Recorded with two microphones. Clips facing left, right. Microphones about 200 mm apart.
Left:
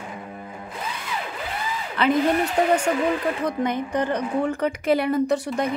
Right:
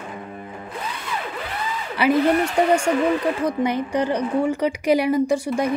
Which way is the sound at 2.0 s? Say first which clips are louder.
Right 2 dB; 10° right (ahead or behind).